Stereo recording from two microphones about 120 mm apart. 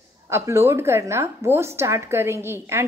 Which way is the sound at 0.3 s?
25° right (ahead or behind).